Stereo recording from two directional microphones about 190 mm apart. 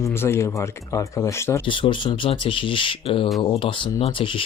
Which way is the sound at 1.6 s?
25° left (ahead or behind).